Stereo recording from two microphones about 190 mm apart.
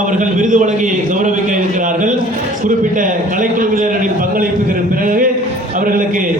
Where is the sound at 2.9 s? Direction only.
45° right (ahead or behind).